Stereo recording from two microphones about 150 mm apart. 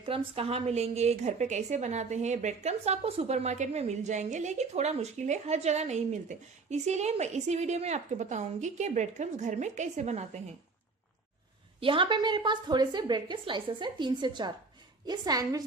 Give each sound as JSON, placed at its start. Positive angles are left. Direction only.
{"t": 0.0, "sound": "a woman's voice", "side_deg": -40}
{"t": 11.8, "sound": "a woman's voice", "side_deg": -35}